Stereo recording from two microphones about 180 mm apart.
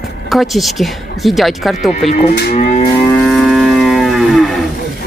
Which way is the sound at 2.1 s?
40° left (ahead or behind).